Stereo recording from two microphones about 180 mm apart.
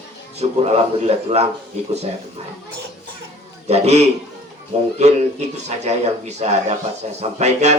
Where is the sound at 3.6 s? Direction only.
35° right (ahead or behind).